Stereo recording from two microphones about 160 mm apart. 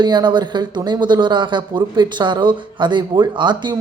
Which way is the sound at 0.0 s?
30° right (ahead or behind).